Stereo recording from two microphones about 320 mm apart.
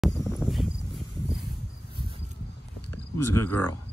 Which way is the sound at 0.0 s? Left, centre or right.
Centre.